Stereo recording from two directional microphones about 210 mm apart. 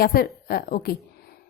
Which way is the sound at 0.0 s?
45° left (ahead or behind).